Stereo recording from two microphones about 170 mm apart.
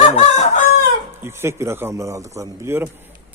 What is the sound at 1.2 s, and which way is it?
Speech, 15° right (ahead or behind).